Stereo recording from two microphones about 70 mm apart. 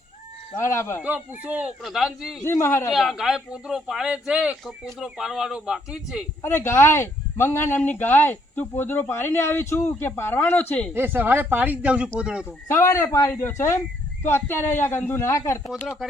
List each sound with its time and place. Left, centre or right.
0.5 s speech: left
1.0 s speech: right
1.8 s speech: centre
2.4 s speech: left
2.9 s speech: centre
4.1 s speech: centre
6.4 s speech: left
10.9 s speech: right; by 12.5 s centre
12.7 s a man's voice: left
15.3 s a man's voice: left